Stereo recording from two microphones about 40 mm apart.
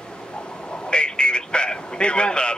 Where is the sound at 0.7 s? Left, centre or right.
Left.